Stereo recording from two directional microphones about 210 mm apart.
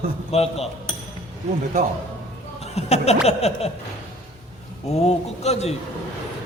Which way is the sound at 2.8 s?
30° left (ahead or behind).